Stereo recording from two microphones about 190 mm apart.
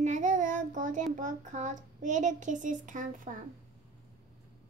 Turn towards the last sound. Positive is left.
turn(degrees=-40)  # may be behind; listen again after turning